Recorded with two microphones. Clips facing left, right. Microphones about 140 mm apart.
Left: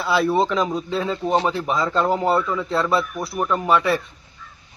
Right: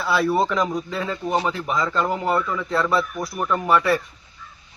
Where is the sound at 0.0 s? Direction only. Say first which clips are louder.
Left 1 dB; centre (ahead or behind).